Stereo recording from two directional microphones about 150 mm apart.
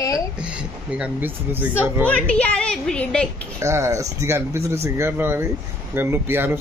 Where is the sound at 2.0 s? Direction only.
10° left (ahead or behind).